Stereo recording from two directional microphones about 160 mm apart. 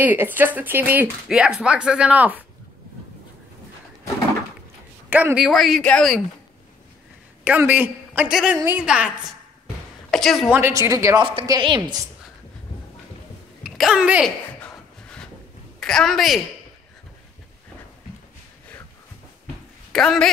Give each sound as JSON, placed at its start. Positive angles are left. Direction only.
{"t": 0.0, "sound": "a man's voice", "side_deg": -10}
{"t": 5.1, "sound": "speech", "side_deg": -10}
{"t": 7.4, "sound": "a man's voice", "side_deg": -10}
{"t": 10.1, "sound": "speech", "side_deg": 0}
{"t": 10.5, "sound": "speech", "side_deg": -15}
{"t": 13.7, "sound": "a woman's voice", "side_deg": -5}
{"t": 14.6, "sound": "a sound", "side_deg": 5}
{"t": 15.8, "sound": "speech", "side_deg": 5}
{"t": 19.9, "sound": "speech", "side_deg": 5}